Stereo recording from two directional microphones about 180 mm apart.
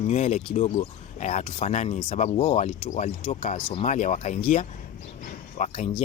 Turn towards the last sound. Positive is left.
turn(degrees=40)  # may be behind; listen again after turning